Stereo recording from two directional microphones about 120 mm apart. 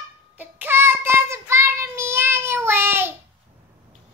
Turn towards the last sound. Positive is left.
turn(degrees=-20)  # may be behind; listen again after turning